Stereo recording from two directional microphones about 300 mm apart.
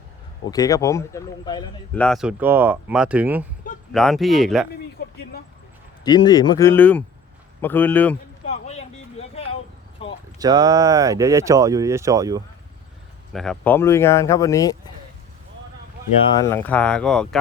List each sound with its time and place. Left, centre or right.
0.5 s speech: centre
2.0 s speech: centre
4.9 s vehicle: left
6.1 s speech: centre
8.4 s a sound: left
10.3 s speech: centre
13.3 s speech: centre
16.3 s speech: centre